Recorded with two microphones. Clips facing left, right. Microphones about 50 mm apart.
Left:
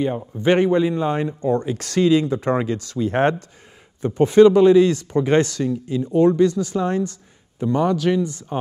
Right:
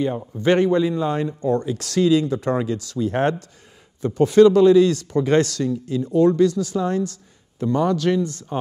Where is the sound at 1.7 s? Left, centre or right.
Left.